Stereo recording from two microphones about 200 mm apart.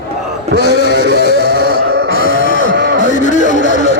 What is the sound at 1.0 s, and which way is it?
Music, 55° left (ahead or behind).